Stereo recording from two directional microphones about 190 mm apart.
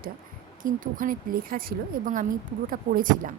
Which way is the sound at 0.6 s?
45° right (ahead or behind).